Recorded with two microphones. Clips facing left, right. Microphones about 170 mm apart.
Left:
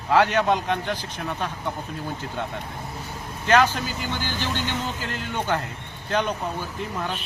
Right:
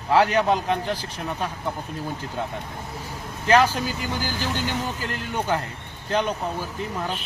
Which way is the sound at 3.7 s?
40° right (ahead or behind).